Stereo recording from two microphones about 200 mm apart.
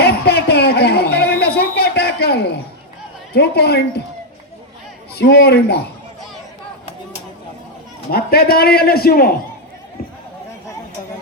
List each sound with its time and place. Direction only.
0.0 s a sound: 55° left (ahead or behind)
3.3 s a man's voice: 55° left (ahead or behind)
5.1 s a man's voice: 55° left (ahead or behind)
8.1 s a man's voice: 50° left (ahead or behind)